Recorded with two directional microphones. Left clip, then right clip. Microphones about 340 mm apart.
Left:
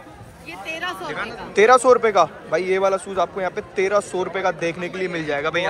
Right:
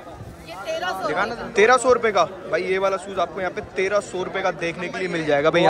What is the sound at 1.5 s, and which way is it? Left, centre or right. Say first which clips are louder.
Speech: left 3 dB; centre.